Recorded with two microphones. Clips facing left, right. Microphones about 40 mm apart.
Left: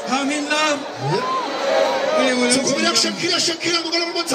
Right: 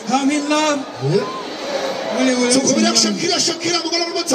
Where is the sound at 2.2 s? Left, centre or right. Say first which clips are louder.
Right 5 dB; left.